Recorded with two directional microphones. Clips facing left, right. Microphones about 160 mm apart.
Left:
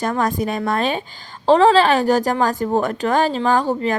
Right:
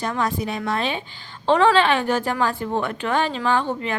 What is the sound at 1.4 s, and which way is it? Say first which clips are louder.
A woman's voice: left 4 dB; 35° left (ahead or behind).